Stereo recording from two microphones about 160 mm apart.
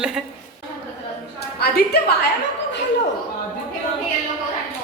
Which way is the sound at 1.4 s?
80° left.